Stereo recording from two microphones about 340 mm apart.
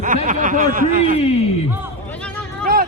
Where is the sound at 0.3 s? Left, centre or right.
Right.